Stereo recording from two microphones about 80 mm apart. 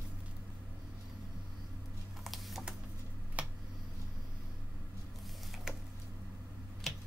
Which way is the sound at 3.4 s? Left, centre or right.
Centre.